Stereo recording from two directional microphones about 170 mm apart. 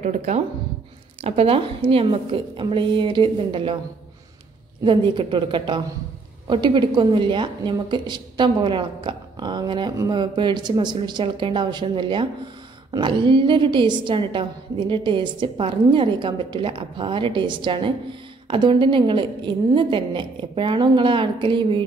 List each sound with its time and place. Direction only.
0.0 s a woman's voice: 40° right (ahead or behind)
4.8 s a woman's voice: 30° right (ahead or behind)